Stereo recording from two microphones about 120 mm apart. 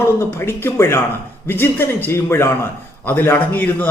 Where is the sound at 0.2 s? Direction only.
20° left (ahead or behind).